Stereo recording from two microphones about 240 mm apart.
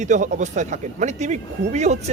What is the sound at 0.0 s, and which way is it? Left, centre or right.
Speech, right.